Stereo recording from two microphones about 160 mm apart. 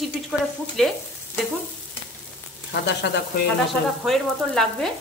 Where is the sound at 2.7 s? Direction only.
90° left.